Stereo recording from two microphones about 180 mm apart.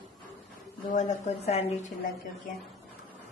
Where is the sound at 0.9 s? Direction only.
40° left (ahead or behind).